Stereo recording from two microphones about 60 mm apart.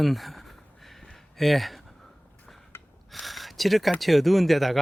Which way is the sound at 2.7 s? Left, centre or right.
Left.